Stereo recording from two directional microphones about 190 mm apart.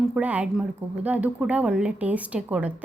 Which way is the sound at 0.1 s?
5° right (ahead or behind).